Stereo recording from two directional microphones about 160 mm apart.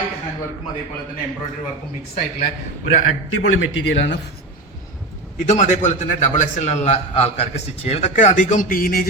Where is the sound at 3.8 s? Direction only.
90° left.